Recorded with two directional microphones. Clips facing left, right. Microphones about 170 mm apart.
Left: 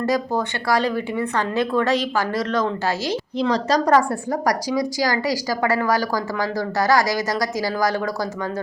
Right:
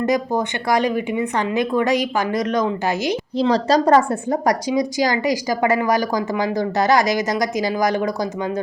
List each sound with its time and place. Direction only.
0.0 s a woman's voice: 20° right (ahead or behind)
3.3 s speech: 30° right (ahead or behind)